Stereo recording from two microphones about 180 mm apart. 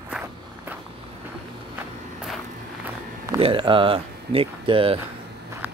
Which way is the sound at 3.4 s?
30° right (ahead or behind).